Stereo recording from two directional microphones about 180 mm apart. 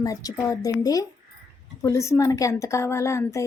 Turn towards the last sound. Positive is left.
turn(degrees=15)  # may be behind; listen again after turning